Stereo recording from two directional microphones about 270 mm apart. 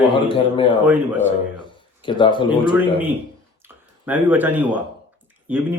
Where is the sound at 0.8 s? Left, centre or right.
Centre.